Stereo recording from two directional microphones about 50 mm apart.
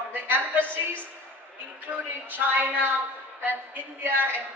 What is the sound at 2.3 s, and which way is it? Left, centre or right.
A woman's voice, right.